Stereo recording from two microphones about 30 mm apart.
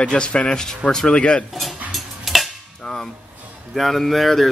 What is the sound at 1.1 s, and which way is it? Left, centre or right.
Speech, left.